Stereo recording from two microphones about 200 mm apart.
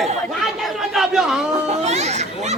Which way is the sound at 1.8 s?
35° right (ahead or behind).